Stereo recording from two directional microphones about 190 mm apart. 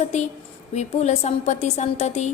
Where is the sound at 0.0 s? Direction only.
35° left (ahead or behind).